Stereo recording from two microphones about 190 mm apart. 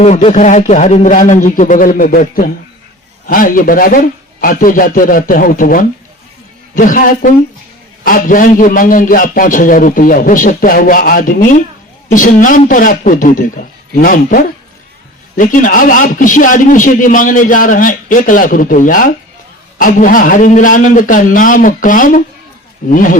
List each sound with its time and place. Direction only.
0.0 s a man's voice: 35° left (ahead or behind)